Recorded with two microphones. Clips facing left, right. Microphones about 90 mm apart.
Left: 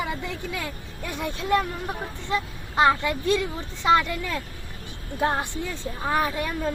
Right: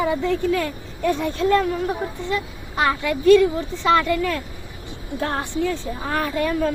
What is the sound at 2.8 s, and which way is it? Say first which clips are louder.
Speech: left 1 dB; 20° left (ahead or behind).